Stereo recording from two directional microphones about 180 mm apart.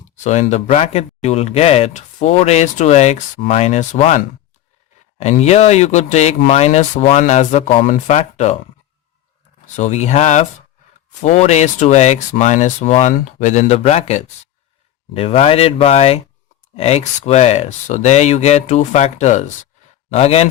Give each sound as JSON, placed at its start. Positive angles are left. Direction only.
{"t": 0.0, "sound": "speech", "side_deg": 40}
{"t": 9.7, "sound": "speech", "side_deg": 40}